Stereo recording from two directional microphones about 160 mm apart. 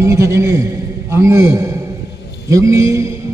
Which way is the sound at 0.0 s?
20° right (ahead or behind).